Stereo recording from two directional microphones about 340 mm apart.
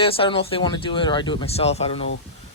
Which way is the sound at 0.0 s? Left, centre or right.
Centre.